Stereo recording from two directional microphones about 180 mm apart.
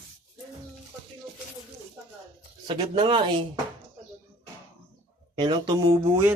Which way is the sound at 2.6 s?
30° right (ahead or behind).